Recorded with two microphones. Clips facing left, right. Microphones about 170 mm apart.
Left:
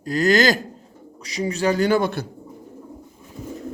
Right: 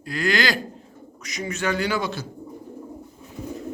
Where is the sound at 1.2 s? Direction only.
30° left (ahead or behind); by 2.3 s 55° left (ahead or behind).